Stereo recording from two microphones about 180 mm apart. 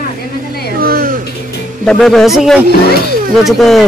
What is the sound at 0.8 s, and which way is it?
Music, 55° right (ahead or behind).